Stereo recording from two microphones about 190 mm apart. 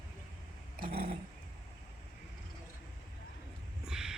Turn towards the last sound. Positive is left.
turn(degrees=0)  # may be behind; listen again after turning